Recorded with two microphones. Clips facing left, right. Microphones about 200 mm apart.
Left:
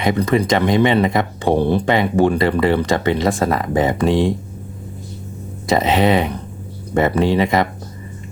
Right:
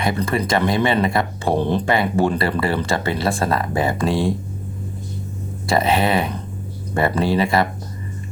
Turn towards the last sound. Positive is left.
turn(degrees=20)  # may be behind; listen again after turning